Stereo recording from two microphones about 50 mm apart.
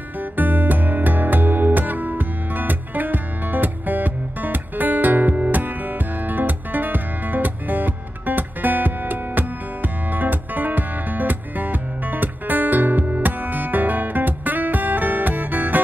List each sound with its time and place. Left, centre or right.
0.2 s music: right